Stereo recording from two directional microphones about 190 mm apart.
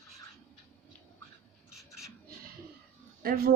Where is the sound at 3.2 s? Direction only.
50° right (ahead or behind).